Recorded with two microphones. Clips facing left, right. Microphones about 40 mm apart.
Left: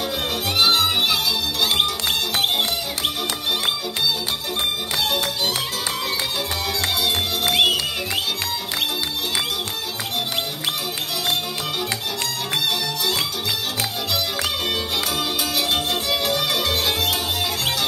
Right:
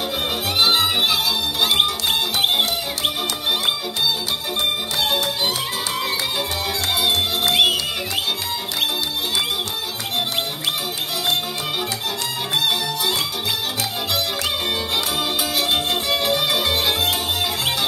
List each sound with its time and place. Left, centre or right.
0.6 s music: centre
6.9 s music: centre
12.5 s music: centre
15.1 s music: centre